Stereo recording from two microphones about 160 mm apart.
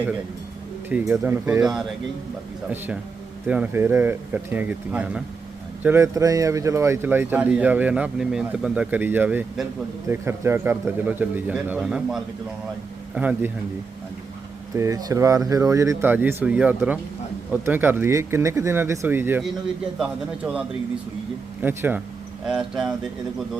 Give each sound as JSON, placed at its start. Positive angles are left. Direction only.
{"t": 0.9, "sound": "speech", "side_deg": -10}
{"t": 14.8, "sound": "speech", "side_deg": -20}
{"t": 22.4, "sound": "speech", "side_deg": 0}